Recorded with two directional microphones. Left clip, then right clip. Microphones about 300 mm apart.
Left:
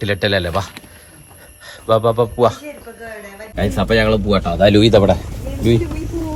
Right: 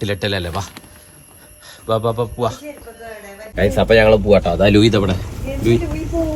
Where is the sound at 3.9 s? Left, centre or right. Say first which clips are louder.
Right 4 dB; right.